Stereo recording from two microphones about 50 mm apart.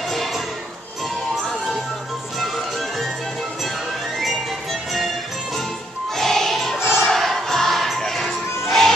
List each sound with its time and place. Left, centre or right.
0.1 s music: centre
2.4 s music: centre
6.1 s music: centre
6.8 s a sound: centre
7.1 s music: centre